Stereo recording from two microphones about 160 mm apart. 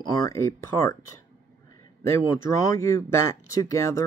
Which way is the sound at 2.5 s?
20° left (ahead or behind).